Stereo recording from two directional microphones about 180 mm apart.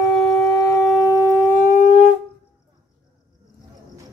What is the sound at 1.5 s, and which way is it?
Shofar, 50° left (ahead or behind).